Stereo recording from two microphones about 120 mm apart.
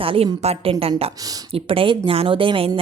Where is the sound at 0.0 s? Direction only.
50° right (ahead or behind).